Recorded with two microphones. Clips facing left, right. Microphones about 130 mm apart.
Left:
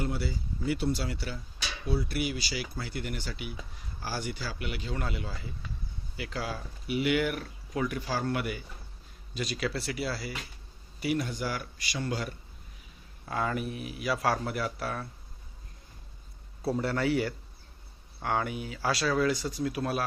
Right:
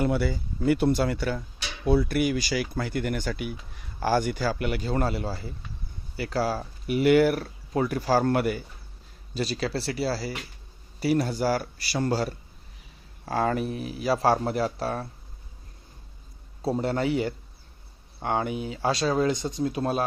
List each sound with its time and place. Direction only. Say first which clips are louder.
0.0 s speech: right 8 dB; 60° right (ahead or behind); by 15.0 s 30° right (ahead or behind)
16.6 s speech: right 3 dB; 25° right (ahead or behind)